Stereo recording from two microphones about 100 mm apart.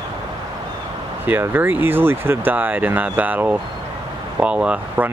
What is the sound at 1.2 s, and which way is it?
Speech, 20° right (ahead or behind).